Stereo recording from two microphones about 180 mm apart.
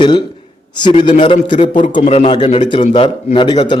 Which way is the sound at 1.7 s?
45° left (ahead or behind).